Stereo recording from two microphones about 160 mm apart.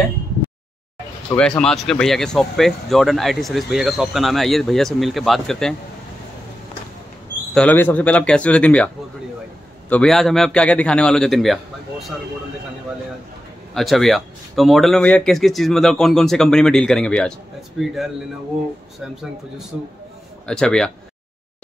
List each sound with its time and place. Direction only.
1.3 s speech: 5° left (ahead or behind)
7.5 s speech: 10° left (ahead or behind)
13.7 s speech: centre (ahead or behind)
20.4 s speech: 5° left (ahead or behind)